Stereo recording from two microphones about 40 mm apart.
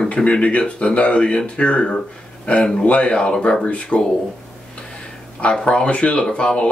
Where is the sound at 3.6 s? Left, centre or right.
Left.